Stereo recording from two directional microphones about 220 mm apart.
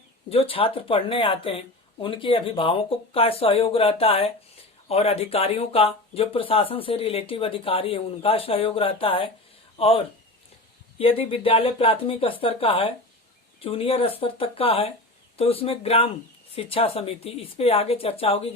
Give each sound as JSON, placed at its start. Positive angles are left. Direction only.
{"t": 0.3, "sound": "speech", "side_deg": 25}